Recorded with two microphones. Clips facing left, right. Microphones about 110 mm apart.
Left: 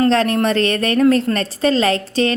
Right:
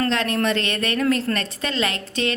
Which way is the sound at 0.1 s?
35° left (ahead or behind).